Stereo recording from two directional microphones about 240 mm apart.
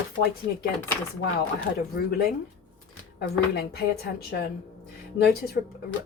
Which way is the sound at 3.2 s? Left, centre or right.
Left.